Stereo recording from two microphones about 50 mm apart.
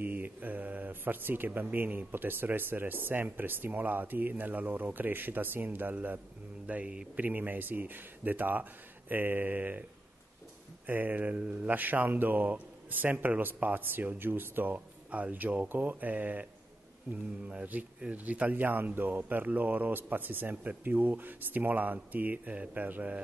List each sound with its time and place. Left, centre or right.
0.0 s speech: right
6.7 s speech: right
7.2 s speech: right
10.9 s speech: right
14.7 s speech: right
18.0 s speech: right